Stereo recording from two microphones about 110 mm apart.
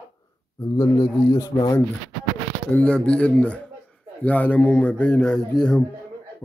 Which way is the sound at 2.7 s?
10° left (ahead or behind).